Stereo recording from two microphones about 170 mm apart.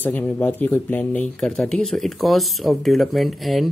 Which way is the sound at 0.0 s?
10° left (ahead or behind).